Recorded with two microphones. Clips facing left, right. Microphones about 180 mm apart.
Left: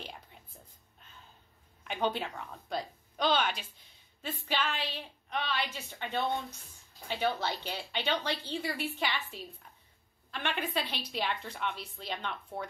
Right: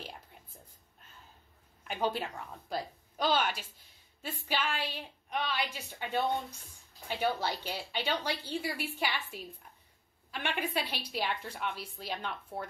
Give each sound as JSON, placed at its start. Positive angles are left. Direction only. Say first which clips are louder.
{"t": 1.9, "sound": "a woman's voice", "louder": "left 1 dB", "side_deg": -5}